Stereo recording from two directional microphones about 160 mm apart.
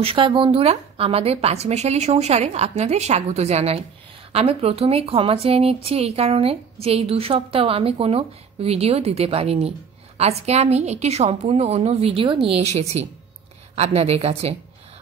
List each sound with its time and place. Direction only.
0.0 s a woman's voice: 35° right (ahead or behind)